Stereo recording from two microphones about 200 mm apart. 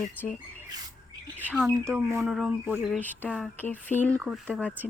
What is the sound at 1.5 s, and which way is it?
Speech, 5° left (ahead or behind).